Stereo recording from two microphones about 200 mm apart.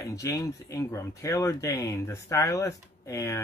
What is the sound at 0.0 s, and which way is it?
Speech, 15° left (ahead or behind).